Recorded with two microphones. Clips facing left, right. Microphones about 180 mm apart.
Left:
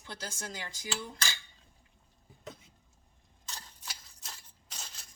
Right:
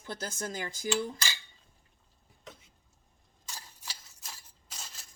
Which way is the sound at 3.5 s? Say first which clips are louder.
Even; 5° right (ahead or behind).